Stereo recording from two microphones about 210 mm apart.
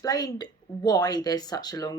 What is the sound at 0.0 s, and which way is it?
Speech, 15° left (ahead or behind).